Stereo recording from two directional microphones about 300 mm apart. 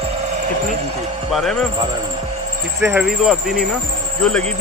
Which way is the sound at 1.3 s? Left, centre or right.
Centre.